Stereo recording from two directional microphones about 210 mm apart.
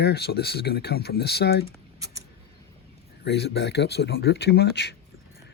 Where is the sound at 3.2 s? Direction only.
55° left (ahead or behind).